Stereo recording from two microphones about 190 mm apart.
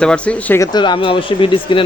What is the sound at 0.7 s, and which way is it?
Speech, 25° left (ahead or behind).